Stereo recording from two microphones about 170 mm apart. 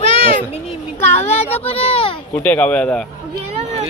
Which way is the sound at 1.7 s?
35° left (ahead or behind).